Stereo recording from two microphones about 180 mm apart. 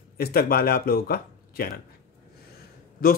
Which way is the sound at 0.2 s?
55° left (ahead or behind).